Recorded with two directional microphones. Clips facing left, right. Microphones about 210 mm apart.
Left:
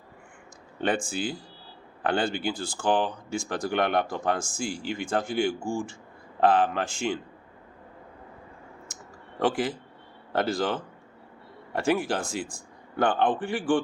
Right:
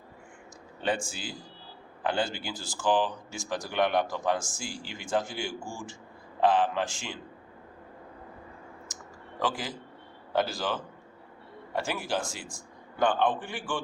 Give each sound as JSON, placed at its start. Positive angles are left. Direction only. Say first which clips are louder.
{"t": 0.8, "sound": "speech", "louder": "left 4 dB", "side_deg": 55}
{"t": 8.9, "sound": "a sound", "louder": "even", "side_deg": 60}
{"t": 9.4, "sound": "speech", "louder": "left 6 dB", "side_deg": 60}
{"t": 11.8, "sound": "speech", "louder": "left 6 dB", "side_deg": 55}